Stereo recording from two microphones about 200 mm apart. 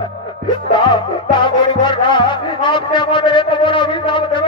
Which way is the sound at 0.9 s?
20° left (ahead or behind).